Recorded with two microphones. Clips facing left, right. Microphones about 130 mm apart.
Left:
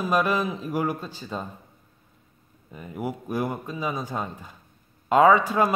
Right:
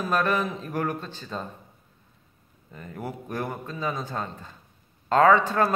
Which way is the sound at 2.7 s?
10° left (ahead or behind).